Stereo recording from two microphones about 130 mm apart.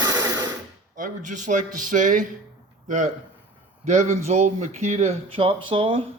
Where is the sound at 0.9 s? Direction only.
80° right.